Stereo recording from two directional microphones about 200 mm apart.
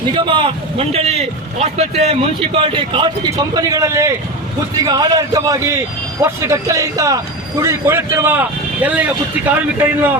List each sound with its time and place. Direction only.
0.1 s a man's voice: 25° right (ahead or behind)